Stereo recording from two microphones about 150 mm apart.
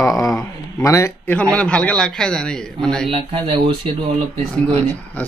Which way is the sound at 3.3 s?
40° right (ahead or behind).